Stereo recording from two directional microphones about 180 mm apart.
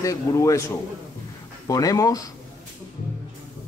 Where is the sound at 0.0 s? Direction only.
15° left (ahead or behind).